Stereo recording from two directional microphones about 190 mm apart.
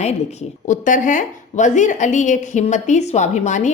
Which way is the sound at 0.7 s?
40° left (ahead or behind).